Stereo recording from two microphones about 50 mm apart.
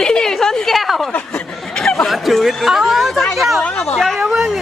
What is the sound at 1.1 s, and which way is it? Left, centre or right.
Speech, left.